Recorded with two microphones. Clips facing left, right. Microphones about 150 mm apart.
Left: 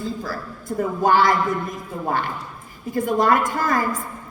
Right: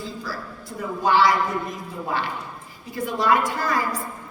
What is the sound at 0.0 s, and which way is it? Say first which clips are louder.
A woman's voice: left 4 dB; 50° left (ahead or behind).